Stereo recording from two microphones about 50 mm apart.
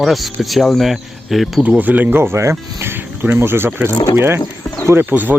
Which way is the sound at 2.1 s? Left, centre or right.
Right.